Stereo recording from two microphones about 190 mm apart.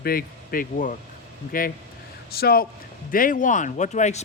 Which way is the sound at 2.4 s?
55° left (ahead or behind).